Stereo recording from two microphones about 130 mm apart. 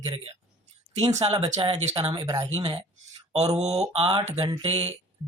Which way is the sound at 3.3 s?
55° right (ahead or behind).